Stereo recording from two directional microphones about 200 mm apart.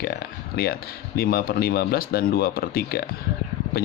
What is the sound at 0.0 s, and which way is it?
Speech, 50° left (ahead or behind).